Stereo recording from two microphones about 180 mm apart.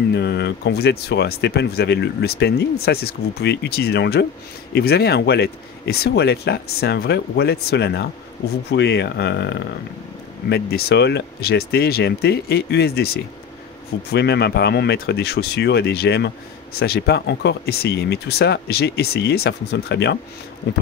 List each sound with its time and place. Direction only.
0.1 s speech: 70° left (ahead or behind)